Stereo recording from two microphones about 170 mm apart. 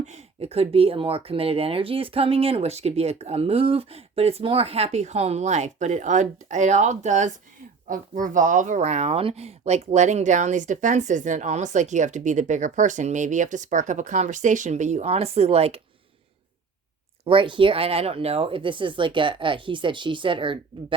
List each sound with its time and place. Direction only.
0.0 s speech: 40° right (ahead or behind)
17.2 s speech: 30° right (ahead or behind)